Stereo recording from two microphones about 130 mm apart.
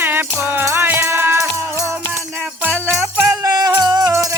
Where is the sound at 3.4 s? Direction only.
30° right (ahead or behind).